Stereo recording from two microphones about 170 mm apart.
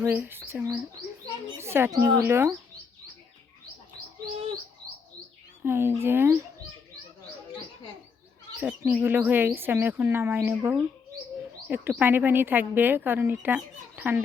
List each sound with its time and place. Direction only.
0.0 s speech: 10° right (ahead or behind)
5.6 s speech: 15° right (ahead or behind)
8.6 s speech: 10° right (ahead or behind)